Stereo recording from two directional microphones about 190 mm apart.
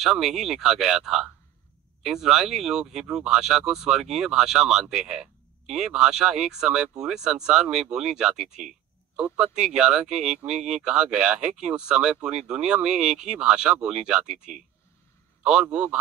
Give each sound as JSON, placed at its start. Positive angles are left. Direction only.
{"t": 0.0, "sound": "speech", "side_deg": 0}